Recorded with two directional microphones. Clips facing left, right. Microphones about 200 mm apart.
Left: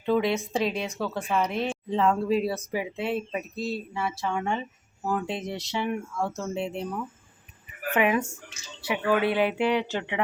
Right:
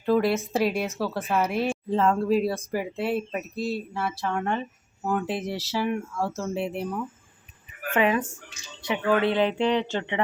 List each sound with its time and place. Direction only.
0.0 s speech: centre (ahead or behind)
7.9 s speech: 15° left (ahead or behind)